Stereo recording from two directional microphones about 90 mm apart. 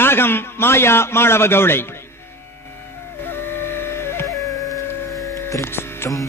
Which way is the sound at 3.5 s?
25° left (ahead or behind).